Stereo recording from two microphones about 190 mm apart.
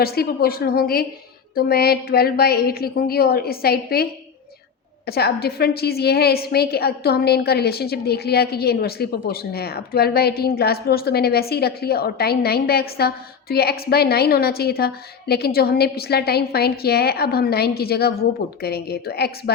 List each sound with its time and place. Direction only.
0.0 s a woman's voice: 55° left (ahead or behind)
5.0 s a woman's voice: 55° left (ahead or behind)